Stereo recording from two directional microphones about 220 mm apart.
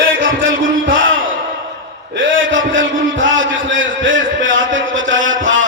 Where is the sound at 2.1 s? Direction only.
60° right (ahead or behind).